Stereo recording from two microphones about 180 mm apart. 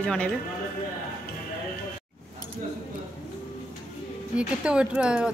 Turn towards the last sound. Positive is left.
turn(degrees=-5)  # may be behind; listen again after turning